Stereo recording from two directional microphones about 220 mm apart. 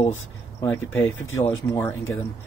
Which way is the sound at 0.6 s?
10° left (ahead or behind).